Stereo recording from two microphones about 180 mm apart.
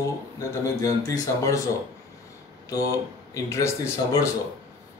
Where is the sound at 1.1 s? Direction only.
15° left (ahead or behind).